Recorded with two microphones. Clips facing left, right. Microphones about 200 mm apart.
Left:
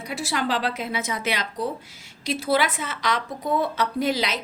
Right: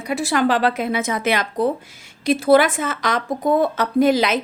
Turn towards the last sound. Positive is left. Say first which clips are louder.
# right 8 dB
turn(degrees=-50)  # may be behind; listen again after turning